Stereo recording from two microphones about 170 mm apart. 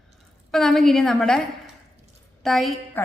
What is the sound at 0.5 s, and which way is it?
Speech, centre (ahead or behind).